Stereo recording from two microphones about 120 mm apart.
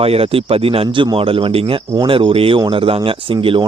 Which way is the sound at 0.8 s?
45° right (ahead or behind).